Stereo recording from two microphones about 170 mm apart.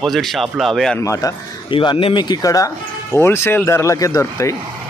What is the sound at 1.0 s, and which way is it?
Speech, 20° left (ahead or behind).